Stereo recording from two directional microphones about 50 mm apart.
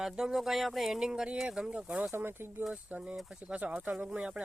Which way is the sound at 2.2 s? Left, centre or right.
Right.